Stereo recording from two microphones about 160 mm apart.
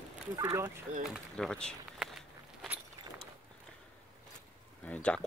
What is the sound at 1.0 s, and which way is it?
Speech, centre (ahead or behind).